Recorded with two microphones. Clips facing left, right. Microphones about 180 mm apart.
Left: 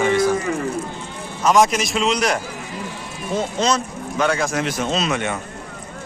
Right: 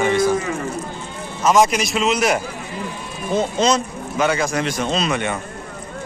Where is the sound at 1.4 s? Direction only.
Centre (ahead or behind).